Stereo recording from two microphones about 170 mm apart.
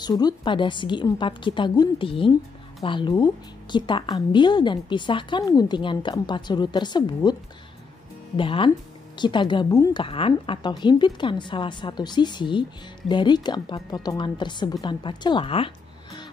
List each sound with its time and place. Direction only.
0.0 s a woman's voice: 25° left (ahead or behind)
8.4 s a woman's voice: 30° left (ahead or behind)